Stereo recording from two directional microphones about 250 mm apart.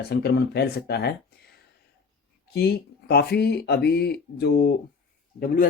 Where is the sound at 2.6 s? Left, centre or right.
Left.